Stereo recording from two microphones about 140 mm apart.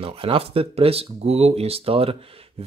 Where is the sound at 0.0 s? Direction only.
40° right (ahead or behind).